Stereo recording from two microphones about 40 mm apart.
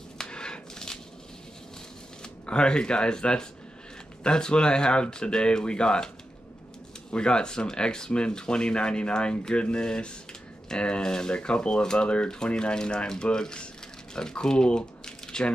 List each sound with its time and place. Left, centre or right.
0.2 s a sound: left
2.4 s speech: left
7.1 s speech: left